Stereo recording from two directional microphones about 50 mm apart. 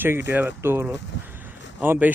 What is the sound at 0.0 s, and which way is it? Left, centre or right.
Speech, right.